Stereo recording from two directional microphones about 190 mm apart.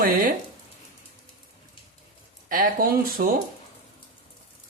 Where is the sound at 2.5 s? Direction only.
45° right (ahead or behind).